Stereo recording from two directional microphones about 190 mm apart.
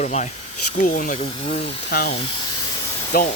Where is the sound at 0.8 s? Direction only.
50° left (ahead or behind).